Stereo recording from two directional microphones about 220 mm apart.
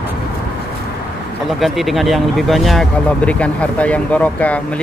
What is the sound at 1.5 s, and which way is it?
Speech, centre (ahead or behind).